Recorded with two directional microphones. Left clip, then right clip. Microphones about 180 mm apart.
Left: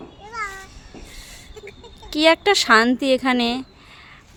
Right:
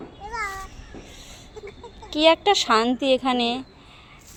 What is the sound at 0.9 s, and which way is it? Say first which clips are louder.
Train: left 1 dB; 20° left (ahead or behind).